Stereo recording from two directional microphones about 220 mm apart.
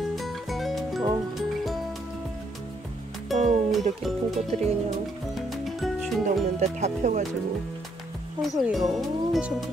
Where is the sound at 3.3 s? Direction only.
Centre (ahead or behind).